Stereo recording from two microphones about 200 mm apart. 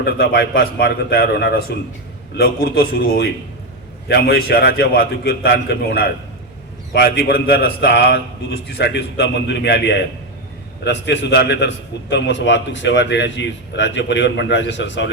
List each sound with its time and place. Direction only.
0.0 s a man's voice: 50° left (ahead or behind)